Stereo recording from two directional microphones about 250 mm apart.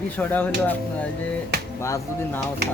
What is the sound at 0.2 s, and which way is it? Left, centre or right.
Speech, centre.